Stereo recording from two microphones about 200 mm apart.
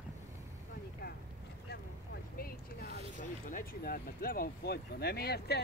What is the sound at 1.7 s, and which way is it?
Vehicle, 50° left (ahead or behind).